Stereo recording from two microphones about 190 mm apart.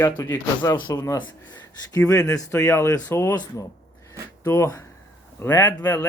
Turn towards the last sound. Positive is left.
turn(degrees=10)  # may be behind; listen again after turning